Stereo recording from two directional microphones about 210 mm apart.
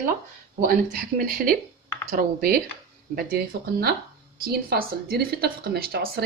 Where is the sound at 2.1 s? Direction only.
45° right (ahead or behind).